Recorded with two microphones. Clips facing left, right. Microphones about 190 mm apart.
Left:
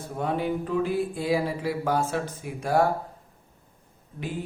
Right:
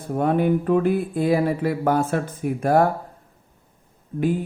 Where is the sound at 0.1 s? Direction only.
55° right (ahead or behind).